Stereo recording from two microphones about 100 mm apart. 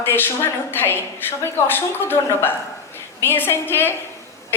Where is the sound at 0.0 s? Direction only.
20° left (ahead or behind).